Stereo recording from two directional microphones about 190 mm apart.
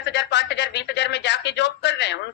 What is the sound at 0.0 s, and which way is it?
Speech, 65° left (ahead or behind).